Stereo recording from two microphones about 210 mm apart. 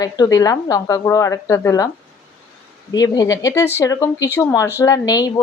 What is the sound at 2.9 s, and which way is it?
A woman's voice, 15° left (ahead or behind).